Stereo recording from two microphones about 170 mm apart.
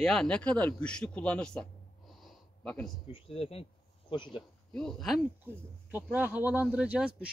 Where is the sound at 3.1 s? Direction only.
35° left (ahead or behind).